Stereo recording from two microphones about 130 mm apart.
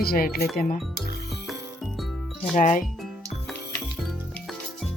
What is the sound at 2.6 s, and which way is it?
Speech, 90° left.